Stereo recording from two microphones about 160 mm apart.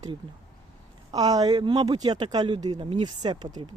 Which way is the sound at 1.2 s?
25° right (ahead or behind).